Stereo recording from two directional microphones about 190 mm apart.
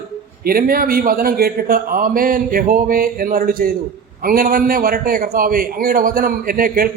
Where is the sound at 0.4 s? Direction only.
50° right (ahead or behind).